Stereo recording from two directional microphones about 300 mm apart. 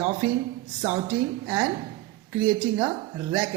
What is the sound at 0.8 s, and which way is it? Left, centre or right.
A woman's voice, centre.